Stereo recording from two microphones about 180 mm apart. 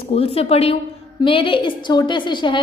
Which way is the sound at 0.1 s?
35° left (ahead or behind).